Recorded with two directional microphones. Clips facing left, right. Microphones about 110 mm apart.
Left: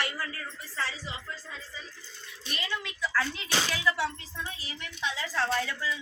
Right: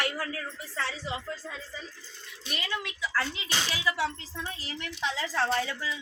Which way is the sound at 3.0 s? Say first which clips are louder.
Left 3 dB; 5° right (ahead or behind).